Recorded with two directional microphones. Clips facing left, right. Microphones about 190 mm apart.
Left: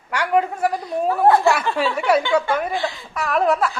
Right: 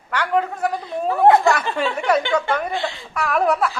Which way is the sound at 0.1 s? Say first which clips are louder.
Left 1 dB; 10° left (ahead or behind).